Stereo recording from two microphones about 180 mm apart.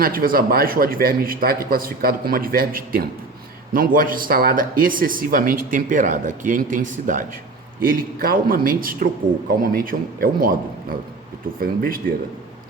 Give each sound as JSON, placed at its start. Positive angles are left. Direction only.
{"t": 0.0, "sound": "speech", "side_deg": -55}